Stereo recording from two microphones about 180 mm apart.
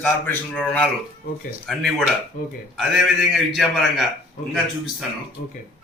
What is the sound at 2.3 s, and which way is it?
Speech, 50° left (ahead or behind).